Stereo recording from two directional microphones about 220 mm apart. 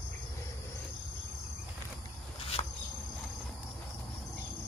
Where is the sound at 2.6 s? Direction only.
25° left (ahead or behind).